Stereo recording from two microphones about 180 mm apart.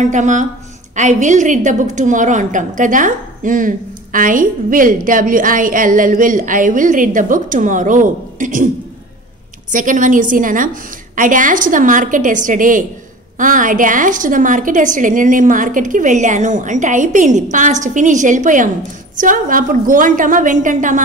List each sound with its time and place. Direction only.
0.0 s a woman's voice: 40° right (ahead or behind)
9.7 s a woman's voice: 45° right (ahead or behind)